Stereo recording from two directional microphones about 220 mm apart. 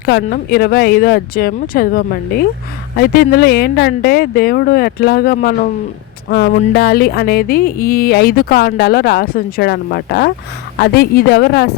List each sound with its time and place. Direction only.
0.0 s speech: 45° left (ahead or behind)
6.7 s speech: 45° left (ahead or behind)